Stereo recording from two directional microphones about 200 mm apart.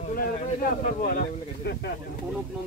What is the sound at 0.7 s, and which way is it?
Speech, 45° left (ahead or behind).